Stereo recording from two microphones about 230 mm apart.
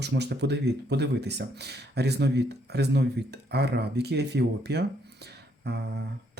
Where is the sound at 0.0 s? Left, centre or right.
Right.